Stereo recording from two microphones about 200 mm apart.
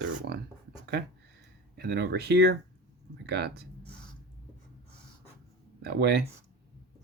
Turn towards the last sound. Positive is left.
turn(degrees=-50)  # may be behind; listen again after turning